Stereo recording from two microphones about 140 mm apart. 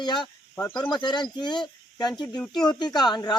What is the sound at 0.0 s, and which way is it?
Speech, 30° left (ahead or behind).